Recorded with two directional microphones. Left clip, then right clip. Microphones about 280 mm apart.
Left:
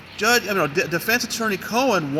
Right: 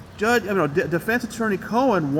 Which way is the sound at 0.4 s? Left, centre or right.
Left.